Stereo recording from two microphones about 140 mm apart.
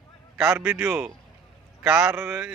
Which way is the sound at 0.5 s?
15° right (ahead or behind).